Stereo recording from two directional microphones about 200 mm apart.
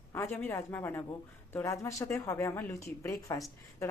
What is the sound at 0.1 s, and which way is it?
Speech, 10° left (ahead or behind).